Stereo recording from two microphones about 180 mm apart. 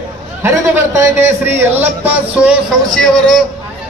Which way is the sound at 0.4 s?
15° right (ahead or behind).